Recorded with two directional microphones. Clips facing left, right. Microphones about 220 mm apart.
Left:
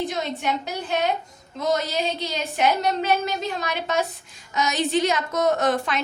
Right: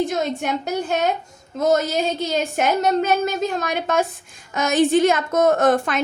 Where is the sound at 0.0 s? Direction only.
45° right (ahead or behind).